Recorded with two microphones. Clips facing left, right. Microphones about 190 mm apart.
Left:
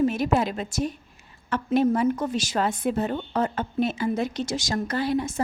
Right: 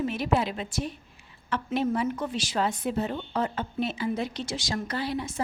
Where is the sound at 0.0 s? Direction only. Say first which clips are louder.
Left 4 dB; 45° left (ahead or behind).